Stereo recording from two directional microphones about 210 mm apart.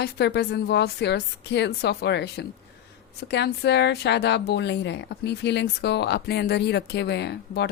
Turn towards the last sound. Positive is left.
turn(degrees=50)  # may be behind; listen again after turning